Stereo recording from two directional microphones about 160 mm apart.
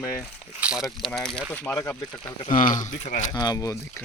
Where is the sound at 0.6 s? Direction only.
5° right (ahead or behind).